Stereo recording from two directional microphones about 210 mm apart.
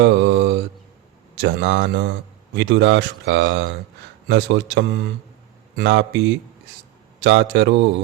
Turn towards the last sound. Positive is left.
turn(degrees=-55)  # may be behind; listen again after turning